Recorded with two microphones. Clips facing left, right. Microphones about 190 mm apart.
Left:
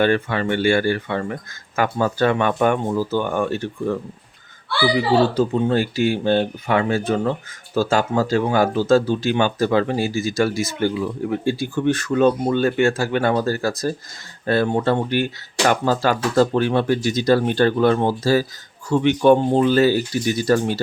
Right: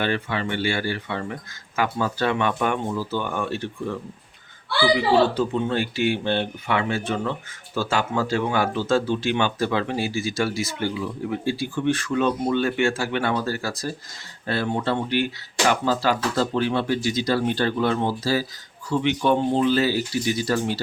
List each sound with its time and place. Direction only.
0.0 s speech: 50° left (ahead or behind)
5.3 s speech: 40° left (ahead or behind)